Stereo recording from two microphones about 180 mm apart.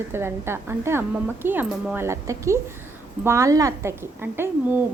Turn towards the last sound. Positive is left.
turn(degrees=-10)  # may be behind; listen again after turning